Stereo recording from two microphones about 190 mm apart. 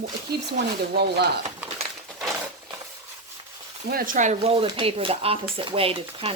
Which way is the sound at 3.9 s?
50° right (ahead or behind).